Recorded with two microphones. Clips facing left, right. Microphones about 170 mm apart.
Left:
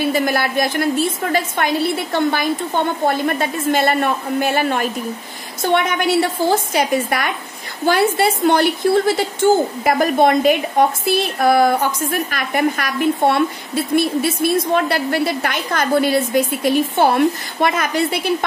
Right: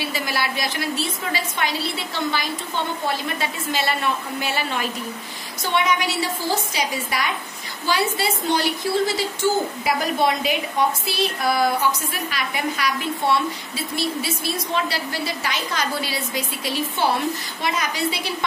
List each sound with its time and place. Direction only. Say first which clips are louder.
0.0 s a woman's voice: left 8 dB; 50° left (ahead or behind)